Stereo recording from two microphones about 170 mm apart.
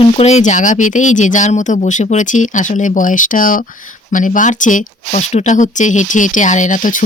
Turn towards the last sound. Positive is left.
turn(degrees=50)  # may be behind; listen again after turning